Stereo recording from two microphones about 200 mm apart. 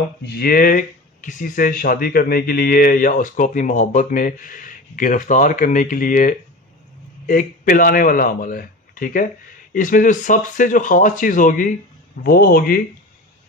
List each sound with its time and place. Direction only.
0.2 s speech: 50° left (ahead or behind)